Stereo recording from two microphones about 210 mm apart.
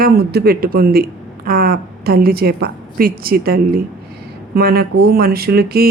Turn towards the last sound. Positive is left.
turn(degrees=-45)  # may be behind; listen again after turning